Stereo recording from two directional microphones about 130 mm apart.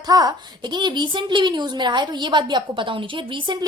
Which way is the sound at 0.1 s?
30° right (ahead or behind).